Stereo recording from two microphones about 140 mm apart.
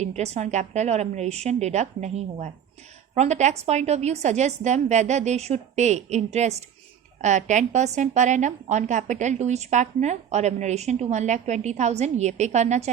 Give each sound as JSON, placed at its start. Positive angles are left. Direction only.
{"t": 0.0, "sound": "a woman's voice", "side_deg": -50}